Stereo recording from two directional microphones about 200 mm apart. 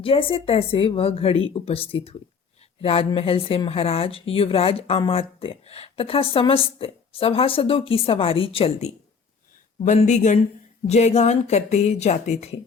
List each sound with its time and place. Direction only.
0.0 s speech: 25° left (ahead or behind)